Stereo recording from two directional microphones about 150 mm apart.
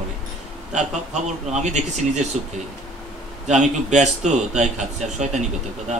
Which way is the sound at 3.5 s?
50° right (ahead or behind).